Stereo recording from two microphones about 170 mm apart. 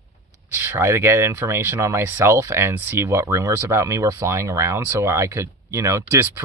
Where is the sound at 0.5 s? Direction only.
15° right (ahead or behind).